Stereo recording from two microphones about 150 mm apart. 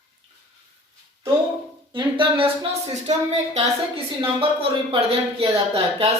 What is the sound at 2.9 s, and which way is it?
Speech, 50° right (ahead or behind).